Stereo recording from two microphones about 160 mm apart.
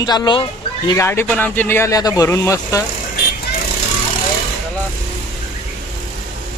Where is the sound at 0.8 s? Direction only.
15° left (ahead or behind).